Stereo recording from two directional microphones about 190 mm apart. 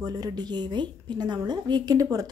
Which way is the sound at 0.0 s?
20° right (ahead or behind).